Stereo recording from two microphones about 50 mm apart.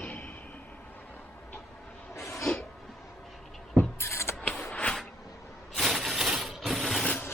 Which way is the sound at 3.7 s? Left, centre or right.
Left.